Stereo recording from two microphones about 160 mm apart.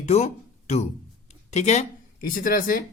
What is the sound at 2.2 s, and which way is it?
Speech, 60° left (ahead or behind).